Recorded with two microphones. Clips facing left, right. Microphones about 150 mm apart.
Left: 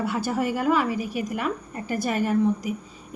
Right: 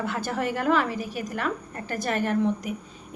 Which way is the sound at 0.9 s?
40° right (ahead or behind).